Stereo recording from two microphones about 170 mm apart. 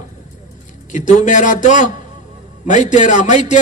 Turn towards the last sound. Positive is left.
turn(degrees=45)  # may be behind; listen again after turning